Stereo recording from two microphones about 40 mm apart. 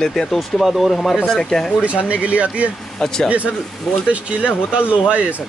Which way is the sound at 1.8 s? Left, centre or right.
Right.